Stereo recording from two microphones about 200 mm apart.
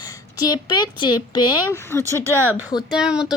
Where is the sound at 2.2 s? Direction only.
10° right (ahead or behind).